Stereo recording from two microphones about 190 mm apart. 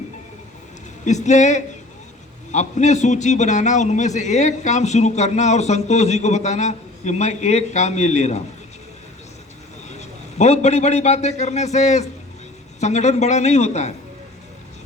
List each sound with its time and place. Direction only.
1.0 s a man's voice: 40° left (ahead or behind)
9.9 s a man's voice: 35° left (ahead or behind)